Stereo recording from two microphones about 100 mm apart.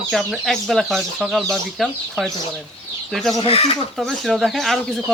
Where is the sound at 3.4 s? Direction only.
75° left (ahead or behind).